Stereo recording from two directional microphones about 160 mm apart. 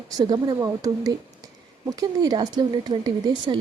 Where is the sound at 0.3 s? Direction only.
25° right (ahead or behind).